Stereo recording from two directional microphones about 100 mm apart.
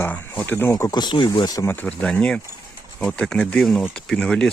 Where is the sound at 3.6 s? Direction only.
Centre (ahead or behind).